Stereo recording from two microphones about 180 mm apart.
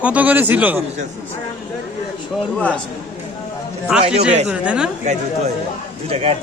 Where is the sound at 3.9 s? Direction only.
5° right (ahead or behind).